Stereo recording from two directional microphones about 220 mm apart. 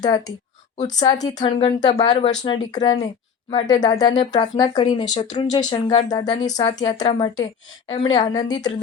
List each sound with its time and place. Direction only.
0.0 s speech: 15° left (ahead or behind)
6.4 s speech: 30° left (ahead or behind)
6.7 s speech: 20° left (ahead or behind)